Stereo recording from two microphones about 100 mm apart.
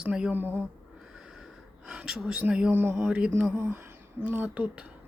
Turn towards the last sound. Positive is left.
turn(degrees=-15)  # may be behind; listen again after turning